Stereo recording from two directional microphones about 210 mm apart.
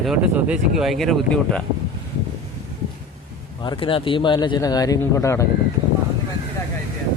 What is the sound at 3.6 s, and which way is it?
Speech, 25° left (ahead or behind).